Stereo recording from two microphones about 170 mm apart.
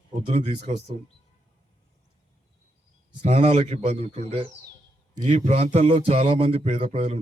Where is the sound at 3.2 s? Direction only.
40° right (ahead or behind).